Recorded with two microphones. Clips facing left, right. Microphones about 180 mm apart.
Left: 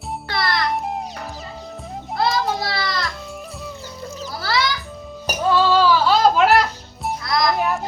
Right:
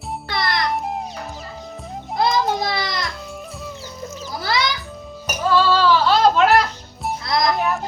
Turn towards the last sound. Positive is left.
turn(degrees=0)  # may be behind; listen again after turning